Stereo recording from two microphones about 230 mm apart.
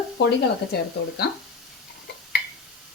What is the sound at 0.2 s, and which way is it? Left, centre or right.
Speech, left.